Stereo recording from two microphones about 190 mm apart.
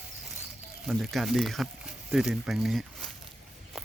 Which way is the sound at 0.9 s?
Centre (ahead or behind).